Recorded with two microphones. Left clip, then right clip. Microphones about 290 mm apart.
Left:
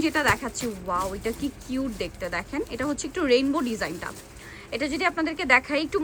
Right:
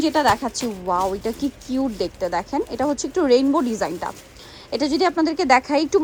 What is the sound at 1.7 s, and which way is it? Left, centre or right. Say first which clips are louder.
Speech: right 7 dB; centre.